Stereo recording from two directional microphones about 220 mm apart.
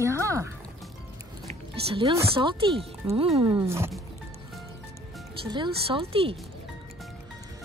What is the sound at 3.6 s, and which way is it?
Speech, 10° right (ahead or behind).